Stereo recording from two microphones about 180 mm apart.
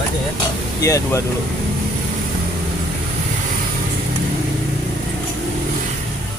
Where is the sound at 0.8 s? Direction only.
20° left (ahead or behind).